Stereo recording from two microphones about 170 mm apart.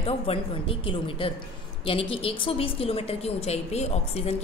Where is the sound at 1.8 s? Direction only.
30° left (ahead or behind).